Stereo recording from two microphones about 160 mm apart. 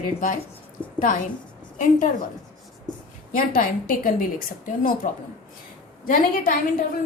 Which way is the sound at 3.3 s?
60° left (ahead or behind).